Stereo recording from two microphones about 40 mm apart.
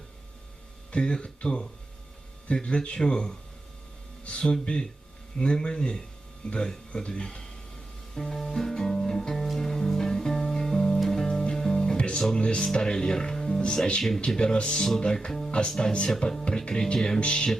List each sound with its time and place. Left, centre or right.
0.9 s speech: left
8.1 s music: centre
11.3 s music: left
12.3 s speech: left